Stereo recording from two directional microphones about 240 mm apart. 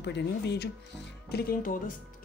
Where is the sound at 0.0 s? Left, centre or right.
Left.